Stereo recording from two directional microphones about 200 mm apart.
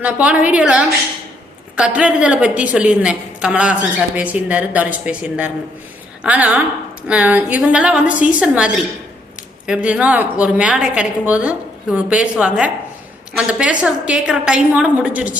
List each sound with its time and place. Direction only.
0.0 s a woman's voice: 5° right (ahead or behind)